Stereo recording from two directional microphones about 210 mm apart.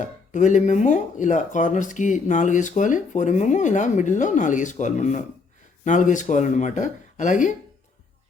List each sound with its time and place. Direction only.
0.0 s speech: 35° left (ahead or behind)